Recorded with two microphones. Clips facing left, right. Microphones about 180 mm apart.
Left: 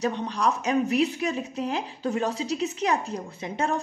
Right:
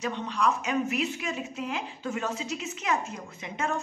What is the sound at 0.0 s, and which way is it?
A woman's voice, 35° left (ahead or behind).